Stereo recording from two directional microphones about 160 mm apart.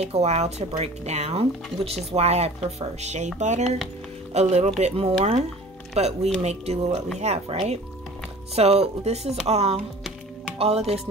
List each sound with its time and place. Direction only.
0.0 s speech: 40° right (ahead or behind)